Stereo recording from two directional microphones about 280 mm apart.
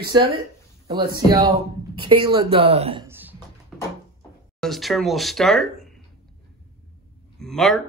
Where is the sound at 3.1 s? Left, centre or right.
Centre.